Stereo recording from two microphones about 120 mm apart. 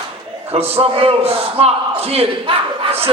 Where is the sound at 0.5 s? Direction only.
55° right (ahead or behind).